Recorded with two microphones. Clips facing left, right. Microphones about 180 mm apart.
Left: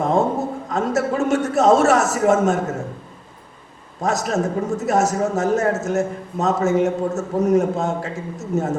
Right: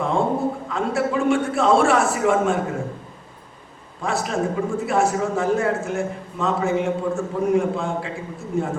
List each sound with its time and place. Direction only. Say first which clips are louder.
0.0 s a man's voice: left 2 dB; 40° left (ahead or behind)
4.0 s a man's voice: left 2 dB; 40° left (ahead or behind)